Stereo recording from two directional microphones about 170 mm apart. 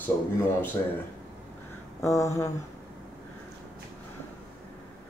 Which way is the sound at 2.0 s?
20° left (ahead or behind).